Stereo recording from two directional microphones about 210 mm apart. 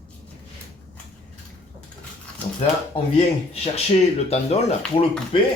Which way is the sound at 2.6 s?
30° left (ahead or behind).